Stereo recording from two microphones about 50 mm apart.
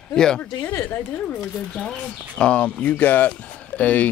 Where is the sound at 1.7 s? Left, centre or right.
Centre.